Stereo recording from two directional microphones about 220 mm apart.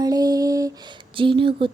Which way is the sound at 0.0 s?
15° right (ahead or behind).